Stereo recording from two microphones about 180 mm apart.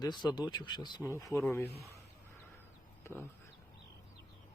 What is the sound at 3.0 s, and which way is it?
Speech, 10° left (ahead or behind).